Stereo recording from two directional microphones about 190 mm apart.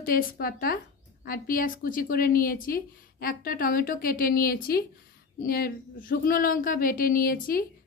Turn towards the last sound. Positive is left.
turn(degrees=50)  # may be behind; listen again after turning